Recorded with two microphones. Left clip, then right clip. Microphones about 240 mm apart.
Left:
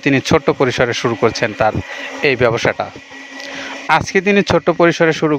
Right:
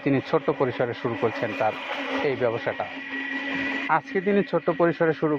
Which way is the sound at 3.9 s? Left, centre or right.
Left.